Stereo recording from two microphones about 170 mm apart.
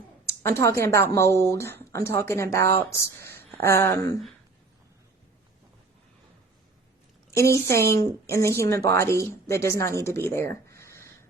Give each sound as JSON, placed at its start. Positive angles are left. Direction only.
{"t": 0.3, "sound": "a woman's voice", "side_deg": 15}
{"t": 3.3, "sound": "a sound", "side_deg": 15}
{"t": 7.3, "sound": "a woman's voice", "side_deg": 15}